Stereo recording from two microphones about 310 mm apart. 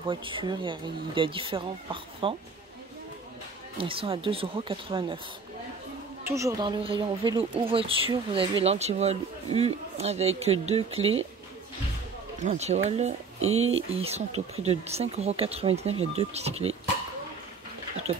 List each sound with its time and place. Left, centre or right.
0.0 s speech: centre
3.7 s speech: centre
6.2 s speech: centre
12.4 s speech: right